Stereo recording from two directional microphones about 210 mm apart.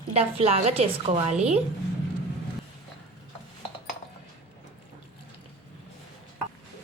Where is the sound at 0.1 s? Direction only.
30° right (ahead or behind).